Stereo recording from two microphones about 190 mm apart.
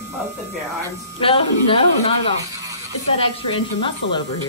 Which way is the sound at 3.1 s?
25° left (ahead or behind).